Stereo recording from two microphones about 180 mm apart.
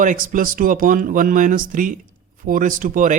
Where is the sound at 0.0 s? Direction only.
45° right (ahead or behind).